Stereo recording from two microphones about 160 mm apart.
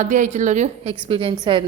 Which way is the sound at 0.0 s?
50° right (ahead or behind).